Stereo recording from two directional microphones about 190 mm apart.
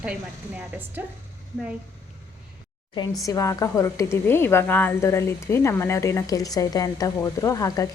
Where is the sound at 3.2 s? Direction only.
20° left (ahead or behind).